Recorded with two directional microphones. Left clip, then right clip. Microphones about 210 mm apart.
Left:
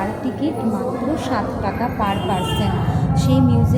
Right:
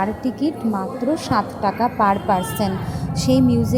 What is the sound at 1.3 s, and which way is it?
A woman's voice, 40° right (ahead or behind).